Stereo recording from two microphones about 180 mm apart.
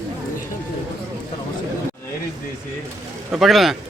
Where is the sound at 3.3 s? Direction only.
Centre (ahead or behind).